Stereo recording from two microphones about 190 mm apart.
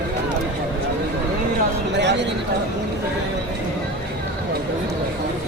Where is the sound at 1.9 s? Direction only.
65° right (ahead or behind).